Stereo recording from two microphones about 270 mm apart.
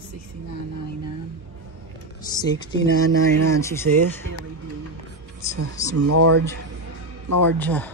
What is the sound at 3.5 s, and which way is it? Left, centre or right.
Speech, centre.